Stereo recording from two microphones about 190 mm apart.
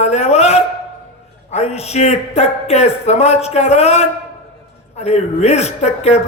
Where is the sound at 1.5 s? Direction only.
35° left (ahead or behind).